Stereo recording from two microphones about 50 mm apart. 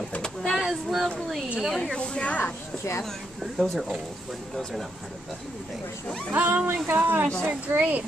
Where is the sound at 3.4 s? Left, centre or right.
Centre.